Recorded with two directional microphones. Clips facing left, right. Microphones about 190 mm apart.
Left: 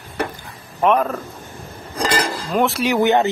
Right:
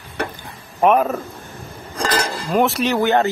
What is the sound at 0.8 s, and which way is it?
Speech, 10° right (ahead or behind).